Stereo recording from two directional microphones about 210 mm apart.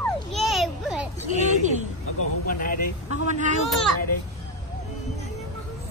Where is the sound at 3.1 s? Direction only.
35° right (ahead or behind).